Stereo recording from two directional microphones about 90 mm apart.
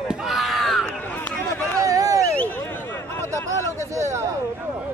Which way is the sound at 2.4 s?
20° left (ahead or behind).